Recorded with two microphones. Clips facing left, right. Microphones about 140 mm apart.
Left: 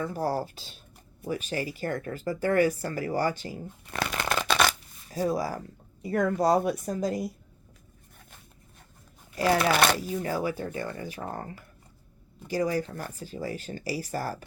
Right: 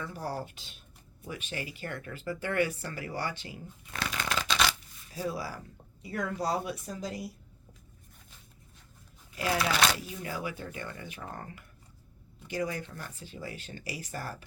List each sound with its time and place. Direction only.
0.0 s speech: 40° left (ahead or behind)
3.8 s shuffling cards: 55° left (ahead or behind)
5.0 s speech: 40° left (ahead or behind)
9.3 s speech: 45° left (ahead or behind)
10.0 s speech: 40° left (ahead or behind)